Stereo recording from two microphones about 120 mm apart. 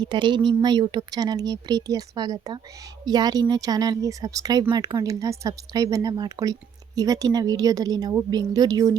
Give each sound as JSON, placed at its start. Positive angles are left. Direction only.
{"t": 0.0, "sound": "speech", "side_deg": -40}